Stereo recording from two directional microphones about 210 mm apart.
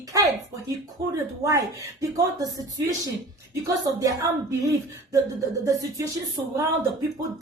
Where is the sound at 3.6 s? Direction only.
15° right (ahead or behind).